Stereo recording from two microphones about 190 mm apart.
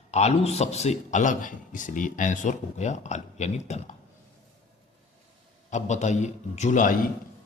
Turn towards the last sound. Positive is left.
turn(degrees=45)  # may be behind; listen again after turning